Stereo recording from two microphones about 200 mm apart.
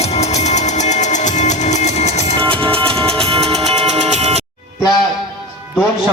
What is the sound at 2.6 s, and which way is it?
Music, 25° right (ahead or behind).